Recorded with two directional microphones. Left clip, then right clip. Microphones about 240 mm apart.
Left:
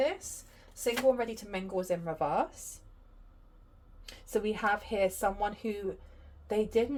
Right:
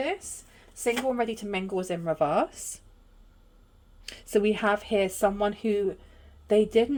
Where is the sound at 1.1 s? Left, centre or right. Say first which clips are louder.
Right 6 dB; right.